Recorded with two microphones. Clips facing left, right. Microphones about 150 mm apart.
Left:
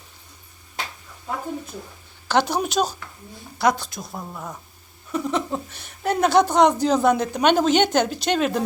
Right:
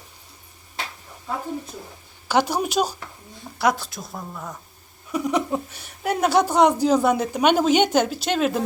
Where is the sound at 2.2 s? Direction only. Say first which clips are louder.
Even; 10° right (ahead or behind).